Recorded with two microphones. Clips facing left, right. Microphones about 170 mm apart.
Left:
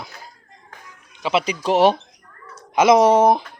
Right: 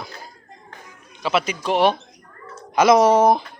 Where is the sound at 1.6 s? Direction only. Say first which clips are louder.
Left 3 dB; 40° left (ahead or behind).